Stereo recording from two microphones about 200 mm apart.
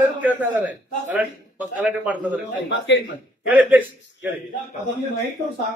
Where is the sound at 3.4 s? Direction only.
5° right (ahead or behind).